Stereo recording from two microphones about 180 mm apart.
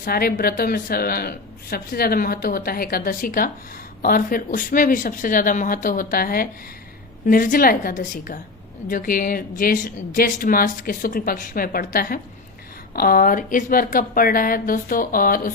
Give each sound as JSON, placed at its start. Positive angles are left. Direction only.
{"t": 0.0, "sound": "a woman's voice", "side_deg": 55}